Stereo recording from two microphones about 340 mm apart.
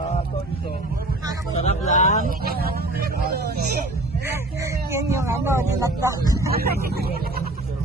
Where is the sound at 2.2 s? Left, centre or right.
Right.